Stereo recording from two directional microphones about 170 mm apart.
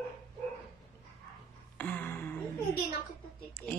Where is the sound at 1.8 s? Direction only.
10° left (ahead or behind).